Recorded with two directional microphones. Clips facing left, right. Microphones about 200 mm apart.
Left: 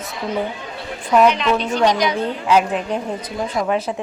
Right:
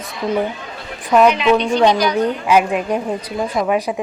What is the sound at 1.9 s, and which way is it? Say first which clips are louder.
Speech: right 2 dB; 20° left (ahead or behind).